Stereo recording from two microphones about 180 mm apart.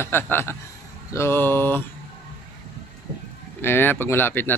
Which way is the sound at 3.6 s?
10° left (ahead or behind).